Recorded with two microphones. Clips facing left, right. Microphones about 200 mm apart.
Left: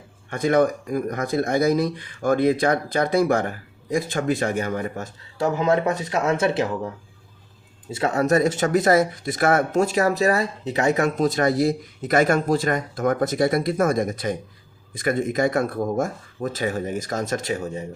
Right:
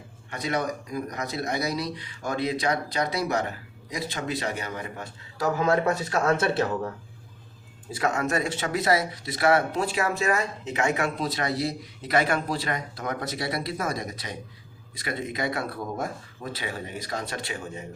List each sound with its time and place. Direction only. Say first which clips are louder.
0.3 s speech: left 9 dB; 50° left (ahead or behind)
5.4 s speech: left 3 dB; 20° left (ahead or behind)
7.9 s speech: left 6 dB; 25° left (ahead or behind)